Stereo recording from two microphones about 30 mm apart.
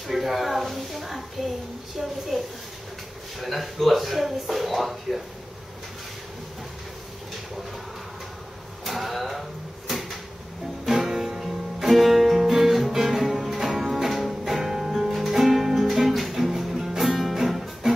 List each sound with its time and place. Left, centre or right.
0.0 s speech: centre
2.3 s speech: centre
8.8 s a sound: centre
10.9 s music: centre